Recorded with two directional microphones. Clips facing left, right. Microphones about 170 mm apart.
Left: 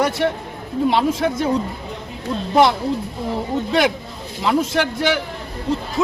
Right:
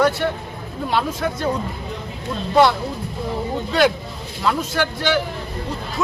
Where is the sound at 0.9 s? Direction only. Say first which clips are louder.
Left 4 dB; 20° left (ahead or behind).